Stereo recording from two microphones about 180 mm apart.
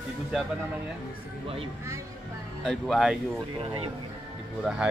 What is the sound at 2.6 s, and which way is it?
Speech, centre (ahead or behind).